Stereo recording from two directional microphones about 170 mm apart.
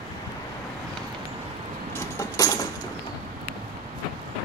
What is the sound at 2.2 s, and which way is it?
Keys jangling, 20° left (ahead or behind).